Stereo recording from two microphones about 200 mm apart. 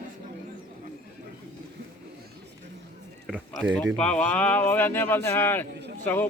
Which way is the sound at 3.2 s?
Centre (ahead or behind).